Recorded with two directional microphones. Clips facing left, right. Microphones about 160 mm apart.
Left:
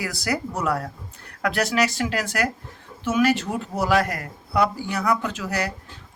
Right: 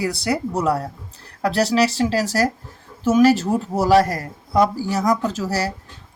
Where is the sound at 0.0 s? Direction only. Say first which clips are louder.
Right 5 dB; 30° right (ahead or behind).